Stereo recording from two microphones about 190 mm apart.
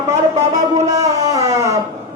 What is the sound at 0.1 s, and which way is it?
Music, 20° right (ahead or behind).